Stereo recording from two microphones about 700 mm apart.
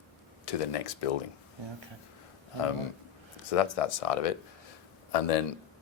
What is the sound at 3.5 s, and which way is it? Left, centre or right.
A man's voice, left.